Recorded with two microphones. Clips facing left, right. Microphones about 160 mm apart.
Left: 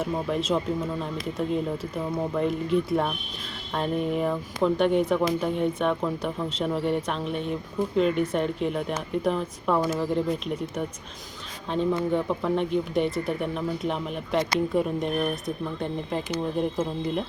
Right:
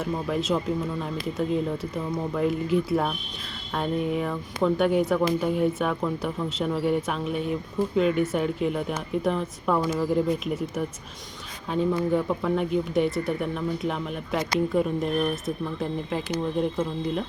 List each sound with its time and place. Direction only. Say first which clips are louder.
0.0 s speech: even; centre (ahead or behind)
2.3 s speech: right 1 dB; centre (ahead or behind)